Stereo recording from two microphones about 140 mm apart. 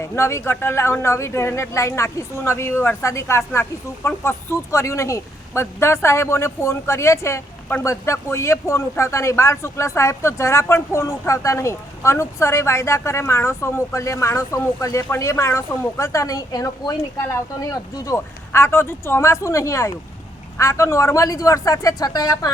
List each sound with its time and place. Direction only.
0.0 s a woman's voice: 20° left (ahead or behind)